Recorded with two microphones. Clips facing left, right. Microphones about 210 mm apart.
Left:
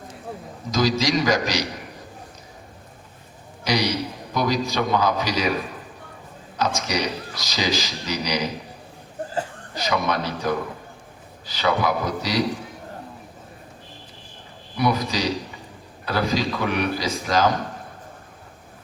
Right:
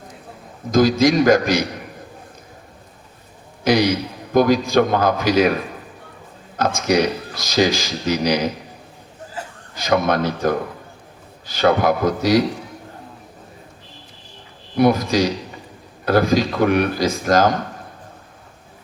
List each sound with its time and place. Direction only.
0.7 s a man's voice: 55° right (ahead or behind)
3.6 s a man's voice: 50° right (ahead or behind)
6.6 s a man's voice: 50° right (ahead or behind)
9.7 s a man's voice: 50° right (ahead or behind)
14.8 s a man's voice: 50° right (ahead or behind)